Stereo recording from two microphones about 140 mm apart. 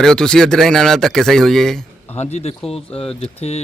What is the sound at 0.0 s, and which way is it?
Speech, 5° left (ahead or behind).